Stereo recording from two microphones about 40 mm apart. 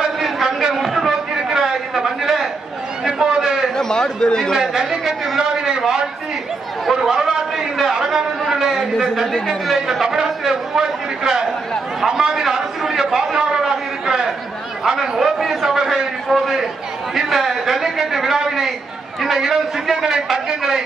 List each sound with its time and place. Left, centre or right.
0.5 s a sound: centre
3.7 s a man's voice: centre
4.6 s a man's voice: centre
7.0 s chatter: centre
7.8 s a man's voice: centre
13.0 s a sound: centre
14.8 s a man's voice: centre